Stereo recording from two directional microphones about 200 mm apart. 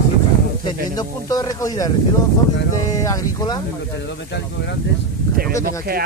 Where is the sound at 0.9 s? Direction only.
20° left (ahead or behind).